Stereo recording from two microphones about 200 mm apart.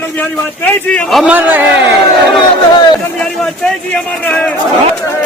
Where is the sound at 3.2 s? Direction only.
5° left (ahead or behind).